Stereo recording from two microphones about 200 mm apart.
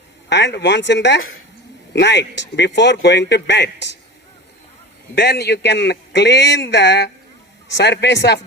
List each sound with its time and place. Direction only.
0.3 s speech: 60° left (ahead or behind)
5.1 s speech: 55° left (ahead or behind)